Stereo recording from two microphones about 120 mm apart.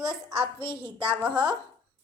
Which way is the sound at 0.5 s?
45° right (ahead or behind).